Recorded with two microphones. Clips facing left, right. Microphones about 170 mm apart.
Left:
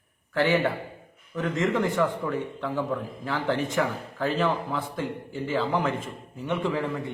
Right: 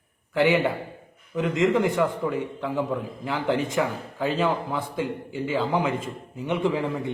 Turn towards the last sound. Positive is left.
turn(degrees=-20)  # may be behind; listen again after turning